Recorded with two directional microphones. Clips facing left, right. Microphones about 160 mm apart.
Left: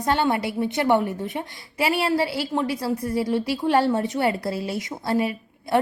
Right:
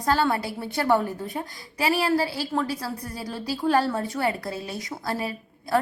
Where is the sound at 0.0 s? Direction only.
20° left (ahead or behind).